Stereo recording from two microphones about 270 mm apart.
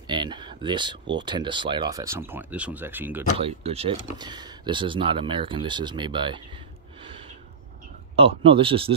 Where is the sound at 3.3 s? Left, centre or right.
Right.